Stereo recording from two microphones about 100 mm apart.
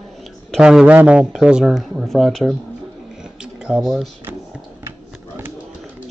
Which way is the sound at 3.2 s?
10° right (ahead or behind).